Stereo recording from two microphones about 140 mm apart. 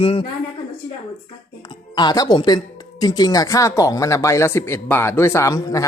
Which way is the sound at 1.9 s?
30° left (ahead or behind).